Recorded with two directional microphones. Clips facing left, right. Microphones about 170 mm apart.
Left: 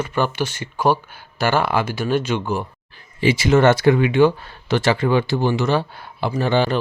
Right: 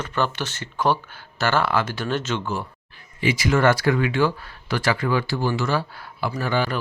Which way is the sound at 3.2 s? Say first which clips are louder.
Left 5 dB; 30° left (ahead or behind).